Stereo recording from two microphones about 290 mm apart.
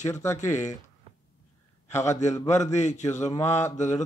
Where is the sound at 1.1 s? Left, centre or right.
Centre.